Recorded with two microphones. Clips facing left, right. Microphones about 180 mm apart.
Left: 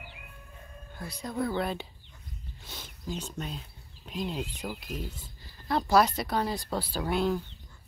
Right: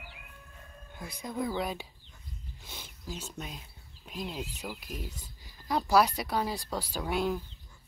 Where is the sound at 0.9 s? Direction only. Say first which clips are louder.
Left 2 dB; 15° right (ahead or behind).